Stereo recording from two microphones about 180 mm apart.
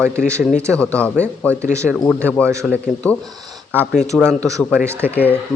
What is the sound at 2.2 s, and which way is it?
Speech, 5° left (ahead or behind).